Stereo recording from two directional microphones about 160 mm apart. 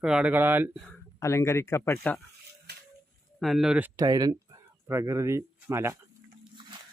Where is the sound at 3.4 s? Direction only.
Centre (ahead or behind).